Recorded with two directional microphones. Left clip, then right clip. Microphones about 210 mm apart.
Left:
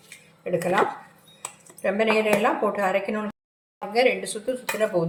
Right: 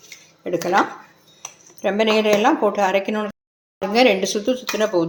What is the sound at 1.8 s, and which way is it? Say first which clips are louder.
A woman's voice: right 4 dB; 40° right (ahead or behind).